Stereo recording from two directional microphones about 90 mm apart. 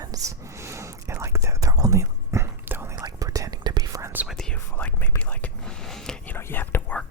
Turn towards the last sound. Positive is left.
turn(degrees=25)  # may be behind; listen again after turning